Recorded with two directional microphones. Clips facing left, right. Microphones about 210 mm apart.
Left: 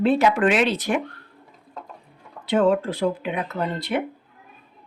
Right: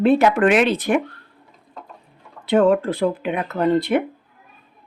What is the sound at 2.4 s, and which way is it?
Speech, 55° right (ahead or behind).